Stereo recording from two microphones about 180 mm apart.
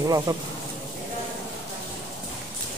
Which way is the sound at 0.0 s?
20° right (ahead or behind).